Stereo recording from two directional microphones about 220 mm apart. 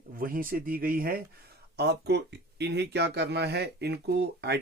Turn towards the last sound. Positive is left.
turn(degrees=-50)  # may be behind; listen again after turning